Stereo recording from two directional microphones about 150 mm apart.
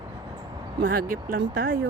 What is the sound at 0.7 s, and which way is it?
Speech, 70° right (ahead or behind).